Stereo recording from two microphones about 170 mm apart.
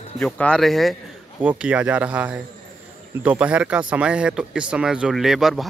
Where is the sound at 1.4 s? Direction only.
10° right (ahead or behind).